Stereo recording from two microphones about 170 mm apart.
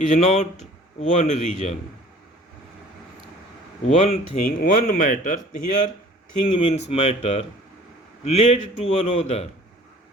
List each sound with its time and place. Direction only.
0.0 s speech: 45° left (ahead or behind)
3.8 s a man's voice: 40° left (ahead or behind)
4.4 s speech: 55° left (ahead or behind)
6.5 s a man's voice: 30° left (ahead or behind)